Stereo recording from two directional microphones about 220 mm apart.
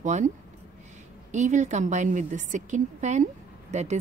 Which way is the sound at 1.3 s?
35° right (ahead or behind).